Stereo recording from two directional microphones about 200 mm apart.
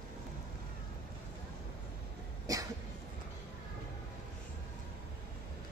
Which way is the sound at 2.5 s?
15° right (ahead or behind).